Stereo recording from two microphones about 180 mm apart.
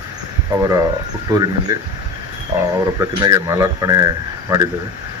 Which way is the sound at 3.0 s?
20° right (ahead or behind).